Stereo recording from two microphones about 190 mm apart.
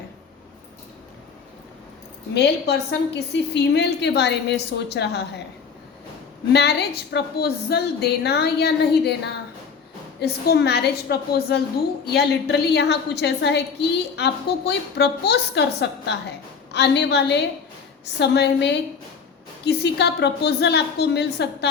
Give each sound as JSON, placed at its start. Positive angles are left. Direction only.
{"t": 2.3, "sound": "a woman's voice", "side_deg": 60}
{"t": 6.5, "sound": "a woman's voice", "side_deg": 60}